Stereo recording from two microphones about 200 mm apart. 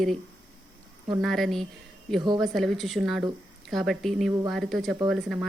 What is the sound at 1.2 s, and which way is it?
A woman's voice, centre (ahead or behind).